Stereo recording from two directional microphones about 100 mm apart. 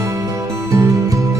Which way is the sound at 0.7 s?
30° right (ahead or behind).